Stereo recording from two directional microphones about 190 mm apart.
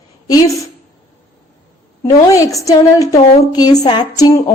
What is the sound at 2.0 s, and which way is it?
A woman's voice, 15° left (ahead or behind).